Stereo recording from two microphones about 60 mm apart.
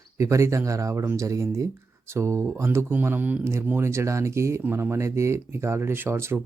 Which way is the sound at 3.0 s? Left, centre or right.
Right.